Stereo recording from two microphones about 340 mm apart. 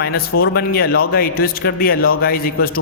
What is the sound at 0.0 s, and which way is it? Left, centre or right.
A man's voice, left.